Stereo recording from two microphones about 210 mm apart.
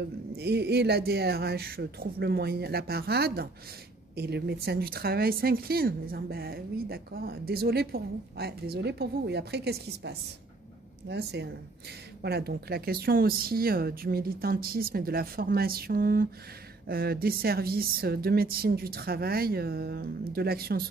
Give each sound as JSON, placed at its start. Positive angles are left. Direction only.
{"t": 0.4, "sound": "speech", "side_deg": -50}